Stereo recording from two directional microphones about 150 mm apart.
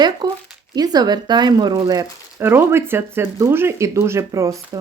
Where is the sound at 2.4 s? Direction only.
15° right (ahead or behind).